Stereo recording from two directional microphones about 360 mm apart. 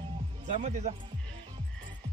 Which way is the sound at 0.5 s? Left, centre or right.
Centre.